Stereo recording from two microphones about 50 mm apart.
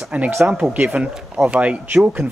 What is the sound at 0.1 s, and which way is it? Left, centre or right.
Speech, right.